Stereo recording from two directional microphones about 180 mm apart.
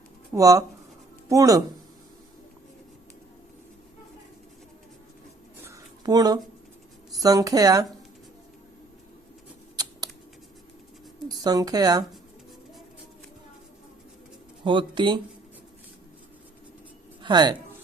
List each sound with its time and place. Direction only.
0.3 s a woman's voice: 20° right (ahead or behind)
5.6 s a sound: 20° right (ahead or behind)
7.2 s a woman's voice: 20° right (ahead or behind)
11.3 s speech: 20° right (ahead or behind)
14.6 s a woman's voice: 25° right (ahead or behind)
17.2 s speech: 25° right (ahead or behind)